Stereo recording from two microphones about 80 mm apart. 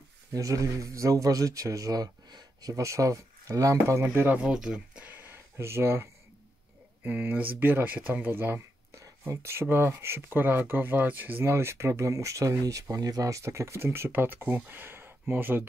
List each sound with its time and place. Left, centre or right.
0.3 s speech: right
4.4 s speech: centre
5.0 s a sound: right
7.0 s speech: right